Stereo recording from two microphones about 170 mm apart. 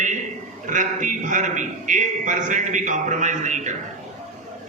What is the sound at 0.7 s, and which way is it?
A man's voice, 50° right (ahead or behind).